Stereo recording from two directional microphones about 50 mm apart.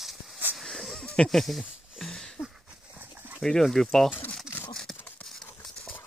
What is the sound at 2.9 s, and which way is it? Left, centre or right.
Dog, right.